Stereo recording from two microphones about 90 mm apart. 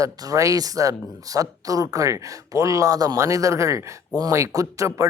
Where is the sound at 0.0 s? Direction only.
40° right (ahead or behind).